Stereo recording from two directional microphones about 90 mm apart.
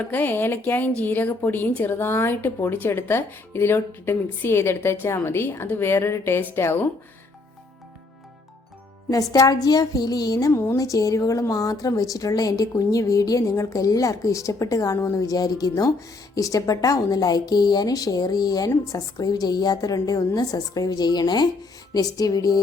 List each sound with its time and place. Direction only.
0.0 s a woman's voice: 20° left (ahead or behind)
9.0 s a woman's voice: 40° left (ahead or behind)
10.5 s a woman's voice: 30° left (ahead or behind); by 22.6 s 45° left (ahead or behind)